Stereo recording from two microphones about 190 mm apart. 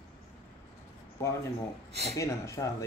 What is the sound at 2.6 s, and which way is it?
Speech, 20° left (ahead or behind).